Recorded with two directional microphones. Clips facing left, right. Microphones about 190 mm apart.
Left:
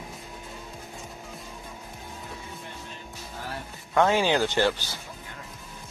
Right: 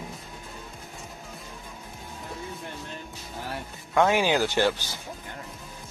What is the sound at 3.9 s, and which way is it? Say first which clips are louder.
Speech: even; 15° right (ahead or behind).